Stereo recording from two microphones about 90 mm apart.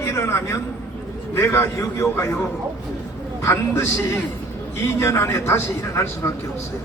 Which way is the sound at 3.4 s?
30° left (ahead or behind).